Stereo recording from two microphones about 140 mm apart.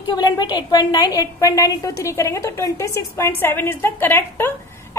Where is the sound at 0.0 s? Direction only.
30° left (ahead or behind).